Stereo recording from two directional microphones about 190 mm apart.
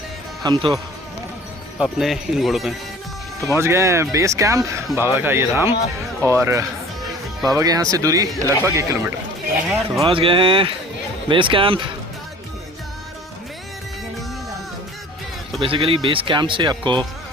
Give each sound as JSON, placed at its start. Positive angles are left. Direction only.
{"t": 0.4, "sound": "speech", "side_deg": -20}
{"t": 1.8, "sound": "speech", "side_deg": 0}
{"t": 3.4, "sound": "speech", "side_deg": -15}
{"t": 9.6, "sound": "a sound", "side_deg": 0}
{"t": 10.1, "sound": "speech", "side_deg": -25}
{"t": 15.6, "sound": "speech", "side_deg": -30}